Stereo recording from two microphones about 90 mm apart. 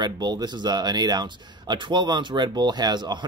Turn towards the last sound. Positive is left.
turn(degrees=-55)  # may be behind; listen again after turning